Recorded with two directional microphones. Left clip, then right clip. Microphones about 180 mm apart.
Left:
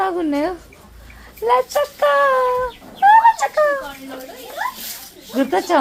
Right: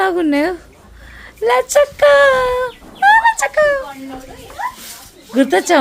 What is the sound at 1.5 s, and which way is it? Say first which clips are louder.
Fowl: right 4 dB; 45° right (ahead or behind).